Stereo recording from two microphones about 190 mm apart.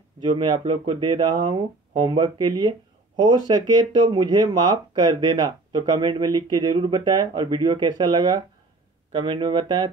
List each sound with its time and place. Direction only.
0.2 s speech: 25° right (ahead or behind)